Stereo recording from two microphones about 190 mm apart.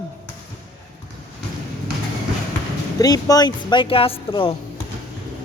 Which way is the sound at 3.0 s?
20° left (ahead or behind).